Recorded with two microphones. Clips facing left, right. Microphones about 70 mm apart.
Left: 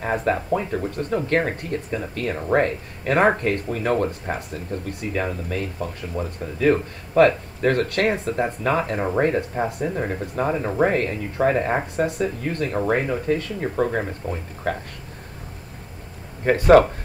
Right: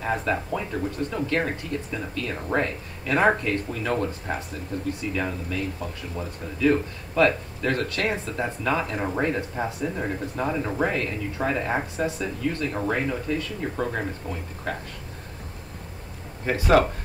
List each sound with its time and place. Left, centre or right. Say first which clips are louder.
0.2 s speech: left 5 dB; left
8.1 s speech: left 5 dB; left
9.1 s speech: left 7 dB; left
16.4 s speech: left 6 dB; left